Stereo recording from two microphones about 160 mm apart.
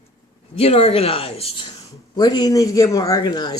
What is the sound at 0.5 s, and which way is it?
Speech, 40° left (ahead or behind).